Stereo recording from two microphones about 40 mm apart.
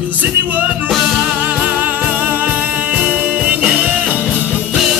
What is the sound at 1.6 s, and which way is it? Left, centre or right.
Music, right.